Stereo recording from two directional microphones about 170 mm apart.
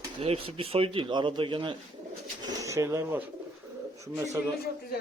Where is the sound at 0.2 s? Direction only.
35° right (ahead or behind).